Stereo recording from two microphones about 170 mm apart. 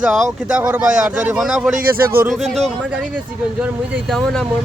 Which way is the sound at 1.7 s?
60° right (ahead or behind).